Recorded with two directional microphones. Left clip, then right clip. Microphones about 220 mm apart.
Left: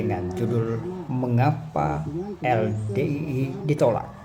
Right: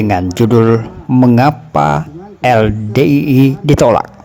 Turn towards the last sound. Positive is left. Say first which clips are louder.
# right 12 dB
turn(degrees=-45)  # may be behind; listen again after turning